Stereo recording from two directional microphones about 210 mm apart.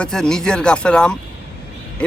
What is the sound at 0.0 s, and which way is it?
A man's voice, 5° left (ahead or behind).